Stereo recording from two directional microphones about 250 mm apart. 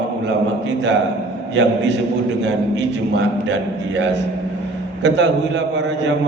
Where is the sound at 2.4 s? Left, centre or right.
Right.